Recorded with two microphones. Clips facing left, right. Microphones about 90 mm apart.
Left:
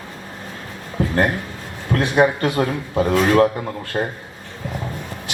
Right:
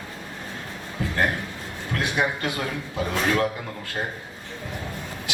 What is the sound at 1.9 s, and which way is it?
A man's voice, 40° left (ahead or behind).